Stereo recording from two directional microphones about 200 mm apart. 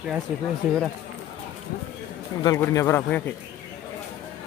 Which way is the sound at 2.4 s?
15° left (ahead or behind).